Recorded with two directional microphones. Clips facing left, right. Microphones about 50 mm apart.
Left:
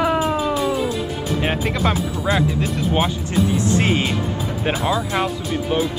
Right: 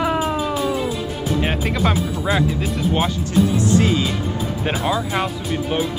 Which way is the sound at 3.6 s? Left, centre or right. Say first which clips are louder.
Right 1 dB; left.